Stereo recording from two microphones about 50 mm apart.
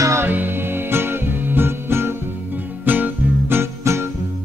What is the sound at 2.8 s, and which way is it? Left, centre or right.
Music, right.